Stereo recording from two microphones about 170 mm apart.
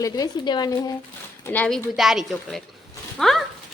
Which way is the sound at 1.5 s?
10° left (ahead or behind).